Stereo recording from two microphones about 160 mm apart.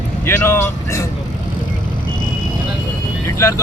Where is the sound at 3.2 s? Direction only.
20° left (ahead or behind).